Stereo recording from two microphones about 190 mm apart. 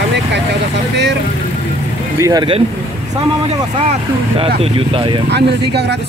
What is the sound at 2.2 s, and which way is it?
Speech, 15° right (ahead or behind).